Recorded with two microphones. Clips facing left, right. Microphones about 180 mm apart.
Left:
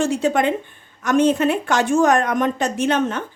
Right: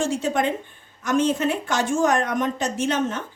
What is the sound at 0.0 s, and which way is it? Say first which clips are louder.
A woman's voice: left 4 dB; 65° left (ahead or behind).